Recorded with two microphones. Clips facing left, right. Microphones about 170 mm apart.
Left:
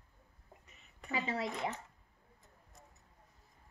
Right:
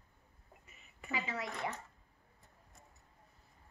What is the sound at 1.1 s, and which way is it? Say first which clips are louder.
Speech: left 3 dB; 30° left (ahead or behind).